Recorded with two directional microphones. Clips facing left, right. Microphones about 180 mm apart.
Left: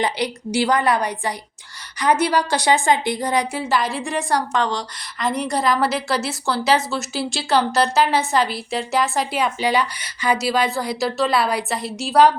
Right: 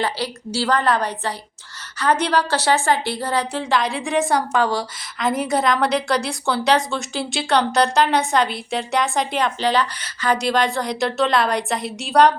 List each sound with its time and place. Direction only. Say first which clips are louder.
0.0 s a woman's voice: left 2 dB; 15° left (ahead or behind); by 12.3 s centre (ahead or behind)